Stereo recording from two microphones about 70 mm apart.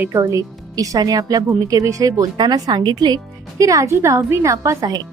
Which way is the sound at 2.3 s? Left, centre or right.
Right.